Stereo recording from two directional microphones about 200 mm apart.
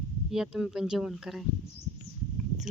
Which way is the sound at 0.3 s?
5° right (ahead or behind).